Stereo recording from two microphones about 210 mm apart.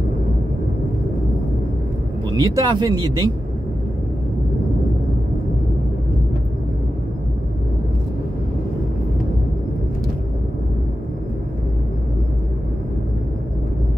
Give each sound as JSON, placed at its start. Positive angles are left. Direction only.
{"t": 2.2, "sound": "speech", "side_deg": -20}